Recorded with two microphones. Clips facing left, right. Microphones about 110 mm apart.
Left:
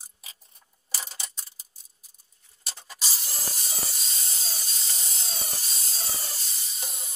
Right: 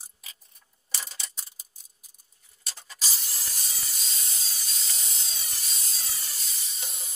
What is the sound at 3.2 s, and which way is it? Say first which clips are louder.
Spray: left 5 dB; 40° left (ahead or behind).